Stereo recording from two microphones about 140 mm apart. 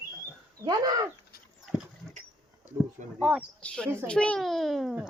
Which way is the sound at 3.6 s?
10° left (ahead or behind).